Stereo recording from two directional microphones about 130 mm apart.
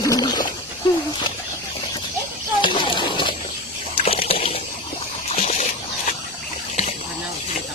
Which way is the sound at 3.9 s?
50° left (ahead or behind).